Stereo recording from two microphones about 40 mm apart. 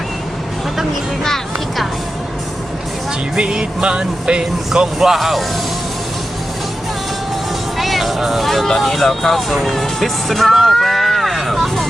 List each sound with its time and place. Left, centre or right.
3.3 s speech: right
4.9 s speech: centre
7.8 s music: centre
8.4 s speech: centre